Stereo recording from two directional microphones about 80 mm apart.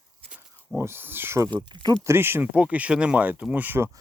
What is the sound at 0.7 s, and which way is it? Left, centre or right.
Speech, right.